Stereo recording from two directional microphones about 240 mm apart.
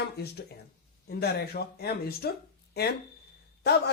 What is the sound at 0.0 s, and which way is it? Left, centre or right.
Speech, left.